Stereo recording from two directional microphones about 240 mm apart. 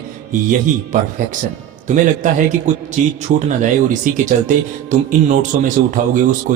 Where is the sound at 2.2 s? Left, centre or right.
Right.